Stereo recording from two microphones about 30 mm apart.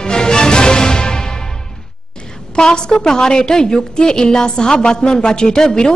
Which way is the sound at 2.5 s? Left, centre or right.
Left.